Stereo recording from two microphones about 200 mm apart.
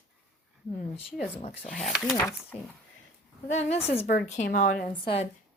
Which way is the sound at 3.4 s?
35° left (ahead or behind).